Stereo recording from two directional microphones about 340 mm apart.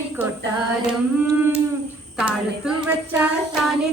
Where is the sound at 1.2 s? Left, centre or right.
Centre.